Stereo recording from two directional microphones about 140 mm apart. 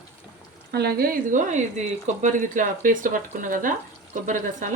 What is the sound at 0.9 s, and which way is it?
Speech, 90° right.